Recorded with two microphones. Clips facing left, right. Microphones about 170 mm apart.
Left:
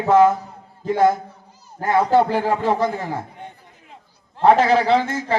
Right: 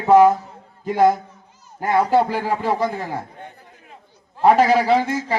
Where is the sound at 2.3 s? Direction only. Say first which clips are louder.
Left 2 dB; 50° left (ahead or behind).